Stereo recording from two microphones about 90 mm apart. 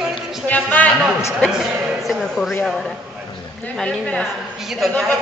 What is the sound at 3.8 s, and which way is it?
Speech, 10° left (ahead or behind).